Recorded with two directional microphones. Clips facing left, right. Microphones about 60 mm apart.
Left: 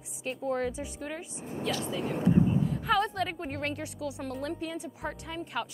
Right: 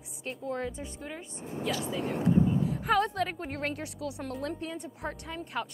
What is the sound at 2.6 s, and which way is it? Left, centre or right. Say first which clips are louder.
A woman's voice: even; centre.